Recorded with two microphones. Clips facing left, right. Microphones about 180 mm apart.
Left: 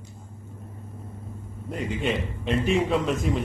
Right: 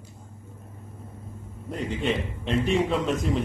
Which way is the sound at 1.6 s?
Centre (ahead or behind).